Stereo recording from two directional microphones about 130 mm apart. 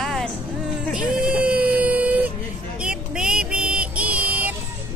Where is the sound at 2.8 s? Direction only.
5° right (ahead or behind).